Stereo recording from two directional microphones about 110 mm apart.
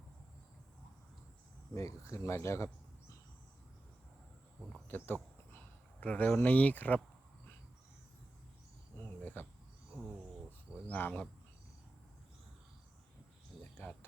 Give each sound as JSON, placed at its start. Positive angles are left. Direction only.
{"t": 1.7, "sound": "speech", "side_deg": 30}
{"t": 4.9, "sound": "speech", "side_deg": 20}
{"t": 9.0, "sound": "cricket", "side_deg": 20}
{"t": 9.9, "sound": "a sound", "side_deg": -5}
{"t": 10.8, "sound": "speech", "side_deg": 15}
{"t": 13.6, "sound": "a sound", "side_deg": 15}